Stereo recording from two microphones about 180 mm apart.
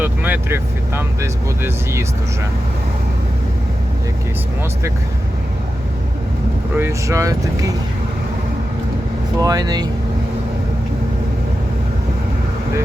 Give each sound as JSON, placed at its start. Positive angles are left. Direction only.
{"t": 0.0, "sound": "speech", "side_deg": -10}
{"t": 6.7, "sound": "speech", "side_deg": -15}
{"t": 9.4, "sound": "speech", "side_deg": -20}